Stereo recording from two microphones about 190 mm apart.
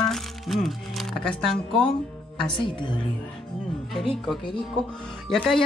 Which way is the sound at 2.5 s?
25° left (ahead or behind).